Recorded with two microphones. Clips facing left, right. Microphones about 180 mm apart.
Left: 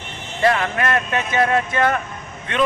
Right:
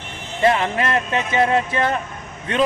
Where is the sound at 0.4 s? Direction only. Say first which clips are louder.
Right 1 dB; 25° right (ahead or behind).